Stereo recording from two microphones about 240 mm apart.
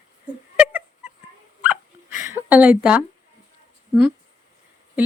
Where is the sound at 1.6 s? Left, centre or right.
Centre.